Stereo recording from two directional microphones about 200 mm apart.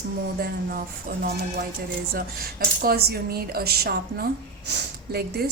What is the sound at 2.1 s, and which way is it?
A woman's voice, 50° right (ahead or behind).